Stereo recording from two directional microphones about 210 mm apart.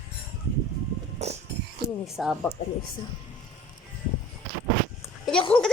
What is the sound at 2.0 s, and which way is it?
Speech, centre (ahead or behind).